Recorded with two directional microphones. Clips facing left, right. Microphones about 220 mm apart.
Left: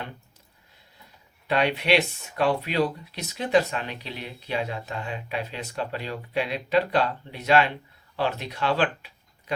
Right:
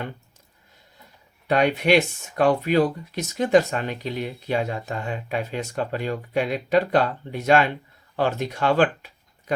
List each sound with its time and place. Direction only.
1.5 s speech: 45° right (ahead or behind)